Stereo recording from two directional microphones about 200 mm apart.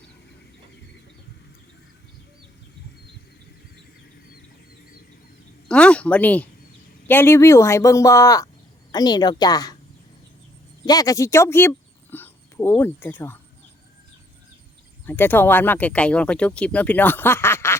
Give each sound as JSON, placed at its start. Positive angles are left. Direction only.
{"t": 5.6, "sound": "a woman's voice", "side_deg": 5}
{"t": 10.8, "sound": "speech", "side_deg": 20}
{"t": 15.0, "sound": "speech", "side_deg": 10}